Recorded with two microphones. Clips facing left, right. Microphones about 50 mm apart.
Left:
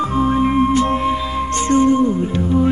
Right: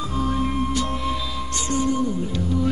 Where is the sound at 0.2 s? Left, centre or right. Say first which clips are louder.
Left 8 dB; left.